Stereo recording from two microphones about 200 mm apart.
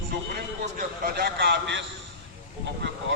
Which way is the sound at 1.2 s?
55° right (ahead or behind).